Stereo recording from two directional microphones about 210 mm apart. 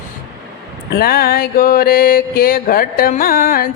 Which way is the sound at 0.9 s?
45° left (ahead or behind).